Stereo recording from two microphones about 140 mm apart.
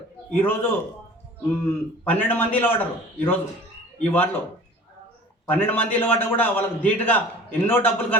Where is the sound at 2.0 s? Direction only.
15° left (ahead or behind).